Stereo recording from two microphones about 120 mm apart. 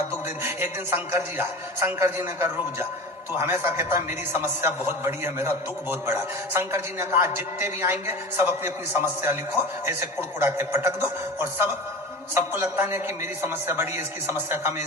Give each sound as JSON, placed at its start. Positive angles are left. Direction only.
{"t": 0.4, "sound": "a man's voice", "side_deg": -20}